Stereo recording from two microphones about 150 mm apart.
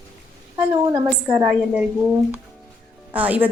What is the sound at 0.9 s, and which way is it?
A woman's voice, 25° right (ahead or behind).